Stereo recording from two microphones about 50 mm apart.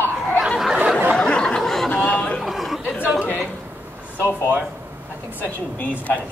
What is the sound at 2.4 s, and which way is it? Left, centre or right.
Chatter, centre.